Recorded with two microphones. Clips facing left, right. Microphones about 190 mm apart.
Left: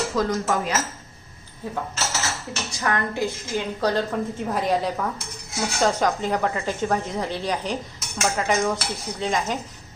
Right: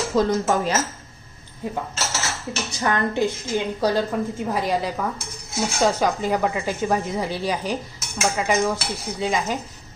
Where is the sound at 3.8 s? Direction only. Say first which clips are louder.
Even; 10° right (ahead or behind).